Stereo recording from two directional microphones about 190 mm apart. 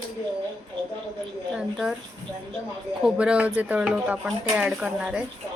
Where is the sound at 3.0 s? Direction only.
5° right (ahead or behind).